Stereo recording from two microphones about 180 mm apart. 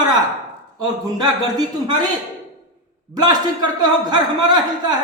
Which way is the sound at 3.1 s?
25° right (ahead or behind).